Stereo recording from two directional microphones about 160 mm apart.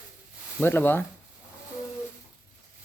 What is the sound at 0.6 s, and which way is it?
Speech, 10° left (ahead or behind).